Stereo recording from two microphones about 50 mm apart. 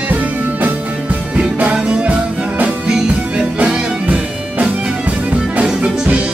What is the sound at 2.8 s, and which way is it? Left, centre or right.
Music, centre.